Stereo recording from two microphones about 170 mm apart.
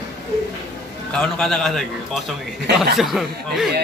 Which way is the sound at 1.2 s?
5° left (ahead or behind).